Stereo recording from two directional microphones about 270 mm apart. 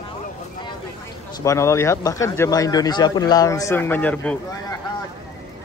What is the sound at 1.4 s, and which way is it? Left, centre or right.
Speech, centre.